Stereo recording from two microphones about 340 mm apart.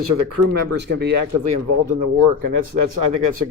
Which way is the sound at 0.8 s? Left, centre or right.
Right.